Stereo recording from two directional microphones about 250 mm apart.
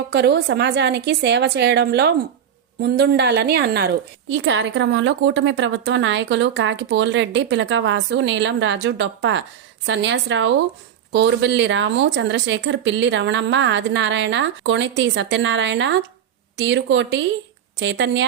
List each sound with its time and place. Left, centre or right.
0.1 s a woman's voice: right